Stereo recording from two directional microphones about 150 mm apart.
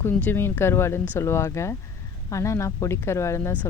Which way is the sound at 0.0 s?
15° left (ahead or behind).